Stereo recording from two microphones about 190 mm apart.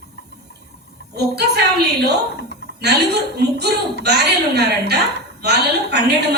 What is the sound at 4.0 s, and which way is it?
A woman's voice, 60° right (ahead or behind).